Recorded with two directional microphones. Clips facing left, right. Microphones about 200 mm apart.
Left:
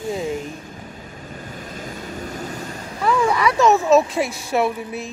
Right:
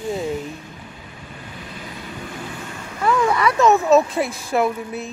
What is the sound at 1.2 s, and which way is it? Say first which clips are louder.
Vehicle: left 3 dB; 45° left (ahead or behind).